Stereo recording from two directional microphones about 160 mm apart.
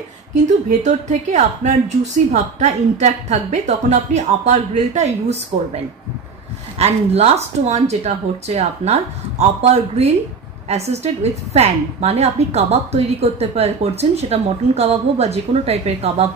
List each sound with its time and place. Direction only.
0.8 s a woman's voice: 50° right (ahead or behind)
6.8 s a woman's voice: 40° right (ahead or behind)